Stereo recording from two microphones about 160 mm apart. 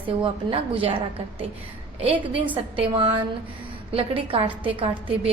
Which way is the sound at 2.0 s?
35° right (ahead or behind).